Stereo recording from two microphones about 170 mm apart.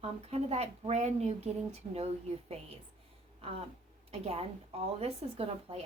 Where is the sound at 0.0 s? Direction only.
40° right (ahead or behind).